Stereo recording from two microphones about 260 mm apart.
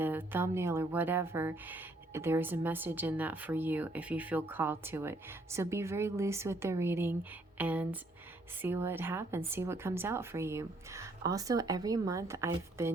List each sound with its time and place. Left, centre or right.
0.0 s speech: centre